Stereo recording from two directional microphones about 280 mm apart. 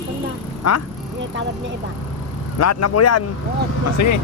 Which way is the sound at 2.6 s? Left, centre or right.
Left.